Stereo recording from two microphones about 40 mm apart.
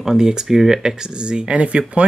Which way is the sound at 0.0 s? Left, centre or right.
Centre.